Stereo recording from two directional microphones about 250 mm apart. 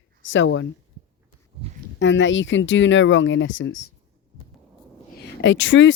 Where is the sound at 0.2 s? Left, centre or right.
Left.